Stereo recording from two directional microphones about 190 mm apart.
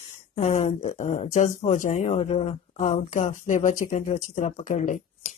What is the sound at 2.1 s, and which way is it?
Speech, 30° left (ahead or behind).